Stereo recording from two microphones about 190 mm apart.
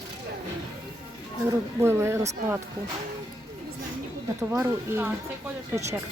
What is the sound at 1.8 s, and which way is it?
Speech, 10° right (ahead or behind).